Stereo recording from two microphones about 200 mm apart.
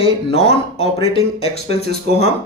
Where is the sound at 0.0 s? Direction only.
30° left (ahead or behind).